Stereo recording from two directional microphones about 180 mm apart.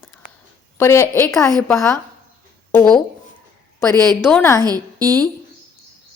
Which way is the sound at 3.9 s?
20° right (ahead or behind).